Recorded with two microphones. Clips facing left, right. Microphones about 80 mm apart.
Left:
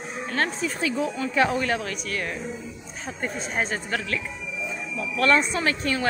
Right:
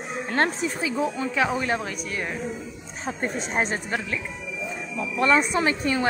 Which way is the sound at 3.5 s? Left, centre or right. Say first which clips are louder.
Even; right.